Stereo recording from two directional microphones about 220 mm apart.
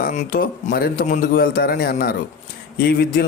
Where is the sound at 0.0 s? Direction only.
40° left (ahead or behind).